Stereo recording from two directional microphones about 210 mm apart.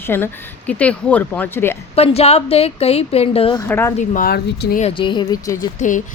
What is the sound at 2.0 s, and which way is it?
A woman's voice, 30° left (ahead or behind).